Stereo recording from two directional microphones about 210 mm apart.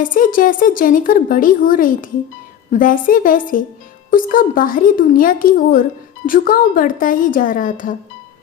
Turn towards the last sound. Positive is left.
turn(degrees=40)  # may be behind; listen again after turning